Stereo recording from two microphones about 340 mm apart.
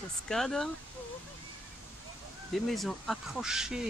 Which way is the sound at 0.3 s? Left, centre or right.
Centre.